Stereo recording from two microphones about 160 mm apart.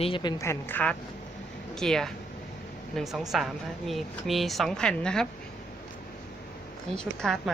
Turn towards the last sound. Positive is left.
turn(degrees=0)  # may be behind; listen again after turning